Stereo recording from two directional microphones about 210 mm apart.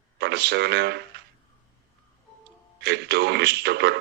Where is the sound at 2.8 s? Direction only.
50° right (ahead or behind).